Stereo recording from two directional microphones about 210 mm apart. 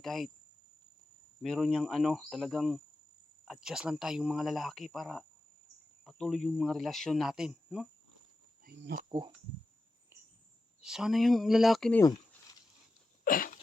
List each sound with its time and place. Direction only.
0.0 s speech: centre (ahead or behind)
1.4 s speech: centre (ahead or behind)
8.6 s speech: 45° right (ahead or behind)
9.0 s speech: 20° right (ahead or behind)
10.8 s speech: centre (ahead or behind)
12.0 s a sound: 15° left (ahead or behind)
13.2 s a sound: 40° left (ahead or behind)